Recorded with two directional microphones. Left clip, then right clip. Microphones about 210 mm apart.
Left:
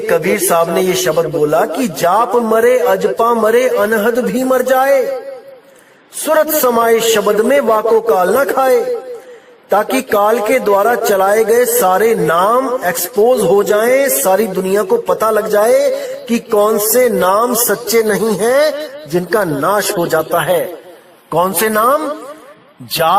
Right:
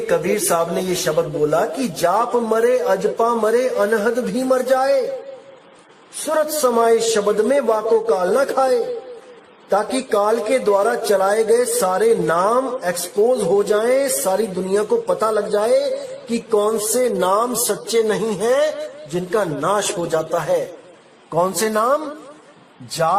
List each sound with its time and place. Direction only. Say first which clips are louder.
0.1 s a man's voice: left 6 dB; 30° left (ahead or behind)
6.3 s a man's voice: left 6 dB; 30° left (ahead or behind)